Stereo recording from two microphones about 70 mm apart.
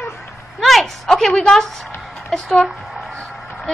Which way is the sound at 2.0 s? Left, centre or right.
Centre.